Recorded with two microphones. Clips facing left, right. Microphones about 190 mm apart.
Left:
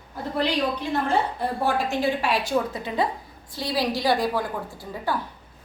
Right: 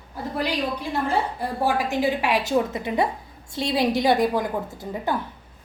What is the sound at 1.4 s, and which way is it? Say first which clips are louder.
A woman's voice: right 1 dB; 15° right (ahead or behind).